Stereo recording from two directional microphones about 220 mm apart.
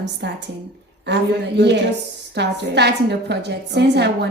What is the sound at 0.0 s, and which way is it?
A woman's voice, 50° right (ahead or behind).